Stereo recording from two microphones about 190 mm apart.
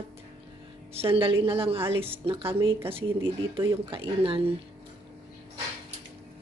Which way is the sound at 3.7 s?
30° right (ahead or behind).